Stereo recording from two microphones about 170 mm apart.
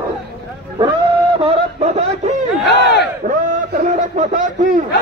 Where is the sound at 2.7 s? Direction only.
80° left.